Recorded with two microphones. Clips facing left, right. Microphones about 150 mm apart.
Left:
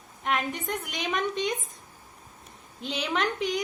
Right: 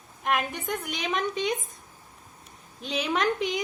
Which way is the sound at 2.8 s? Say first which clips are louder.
Right 2 dB; 5° right (ahead or behind).